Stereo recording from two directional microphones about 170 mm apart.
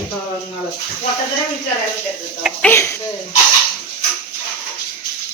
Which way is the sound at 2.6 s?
15° left (ahead or behind).